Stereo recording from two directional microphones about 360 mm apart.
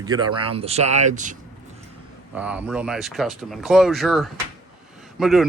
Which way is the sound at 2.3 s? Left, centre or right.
Centre.